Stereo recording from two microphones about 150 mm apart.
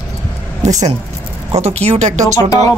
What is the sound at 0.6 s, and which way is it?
Speech, 50° right (ahead or behind).